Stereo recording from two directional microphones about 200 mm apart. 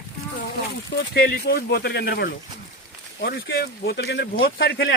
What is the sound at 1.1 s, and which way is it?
Speech, 50° left (ahead or behind).